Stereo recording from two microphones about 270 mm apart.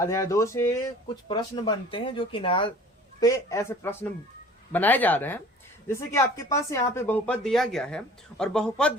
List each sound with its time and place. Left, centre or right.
0.0 s speech: centre